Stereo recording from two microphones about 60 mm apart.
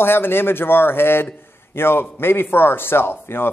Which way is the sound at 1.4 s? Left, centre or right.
Left.